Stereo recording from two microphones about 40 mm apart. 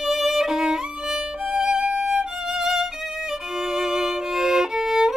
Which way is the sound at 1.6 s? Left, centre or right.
Centre.